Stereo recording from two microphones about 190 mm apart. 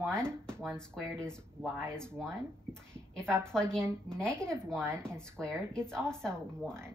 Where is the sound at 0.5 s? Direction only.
5° left (ahead or behind).